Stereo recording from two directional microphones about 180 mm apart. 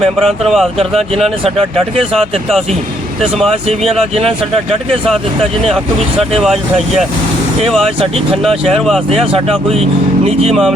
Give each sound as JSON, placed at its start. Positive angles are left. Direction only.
{"t": 0.0, "sound": "speech", "side_deg": 0}
{"t": 2.1, "sound": "speech", "side_deg": 0}
{"t": 4.1, "sound": "speech", "side_deg": -35}
{"t": 4.5, "sound": "speech", "side_deg": 0}
{"t": 8.4, "sound": "speech", "side_deg": 0}
{"t": 9.0, "sound": "speech", "side_deg": -35}
{"t": 10.5, "sound": "speech", "side_deg": 0}